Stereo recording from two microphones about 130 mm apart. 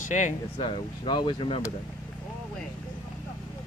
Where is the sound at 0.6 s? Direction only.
35° left (ahead or behind).